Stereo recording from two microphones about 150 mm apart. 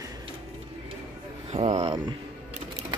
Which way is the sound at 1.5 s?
50° right (ahead or behind).